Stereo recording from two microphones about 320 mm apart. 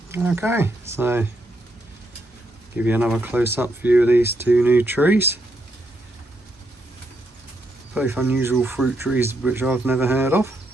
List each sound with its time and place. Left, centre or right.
0.1 s speech: centre
2.7 s speech: centre
7.9 s speech: centre